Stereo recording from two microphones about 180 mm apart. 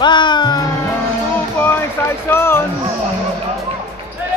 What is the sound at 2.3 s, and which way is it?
Speech, 15° left (ahead or behind).